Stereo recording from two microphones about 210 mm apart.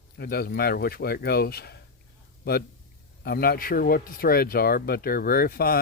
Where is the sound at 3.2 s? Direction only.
45° left (ahead or behind).